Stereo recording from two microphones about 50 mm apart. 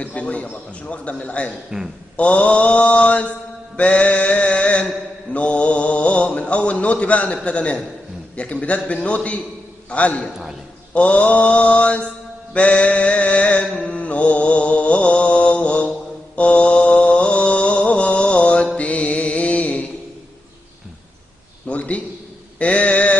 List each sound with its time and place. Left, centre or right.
0.0 s mantra: left
1.7 s speech: centre
2.1 s mantra: left
21.6 s a sound: left
22.6 s mantra: left